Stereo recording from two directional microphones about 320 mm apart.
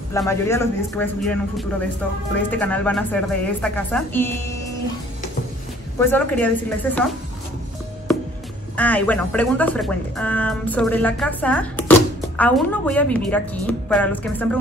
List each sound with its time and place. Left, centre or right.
0.1 s speech: centre
5.9 s speech: centre
8.7 s speech: centre